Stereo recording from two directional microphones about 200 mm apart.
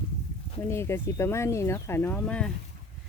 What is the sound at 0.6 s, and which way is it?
Speech, 15° left (ahead or behind).